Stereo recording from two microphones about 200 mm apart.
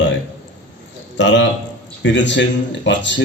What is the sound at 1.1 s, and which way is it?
A man's voice, 65° left (ahead or behind).